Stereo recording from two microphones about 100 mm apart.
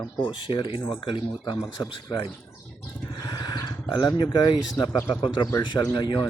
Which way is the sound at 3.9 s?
45° left (ahead or behind).